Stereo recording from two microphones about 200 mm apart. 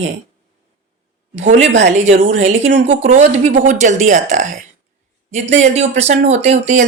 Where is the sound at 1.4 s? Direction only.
35° right (ahead or behind).